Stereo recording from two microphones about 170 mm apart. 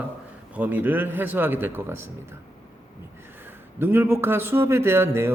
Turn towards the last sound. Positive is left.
turn(degrees=-15)  # may be behind; listen again after turning